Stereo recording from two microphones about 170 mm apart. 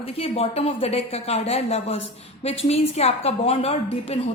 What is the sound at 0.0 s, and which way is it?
Speech, 35° left (ahead or behind).